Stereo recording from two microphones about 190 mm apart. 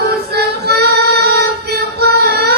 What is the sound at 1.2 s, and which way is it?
Female singing, 55° right (ahead or behind).